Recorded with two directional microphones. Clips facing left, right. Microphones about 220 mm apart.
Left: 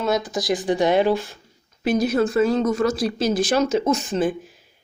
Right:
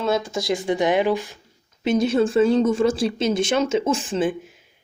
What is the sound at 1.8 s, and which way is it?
Speech, 25° right (ahead or behind).